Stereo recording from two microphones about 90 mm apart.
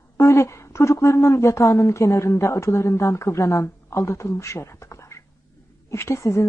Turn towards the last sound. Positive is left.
turn(degrees=30)  # may be behind; listen again after turning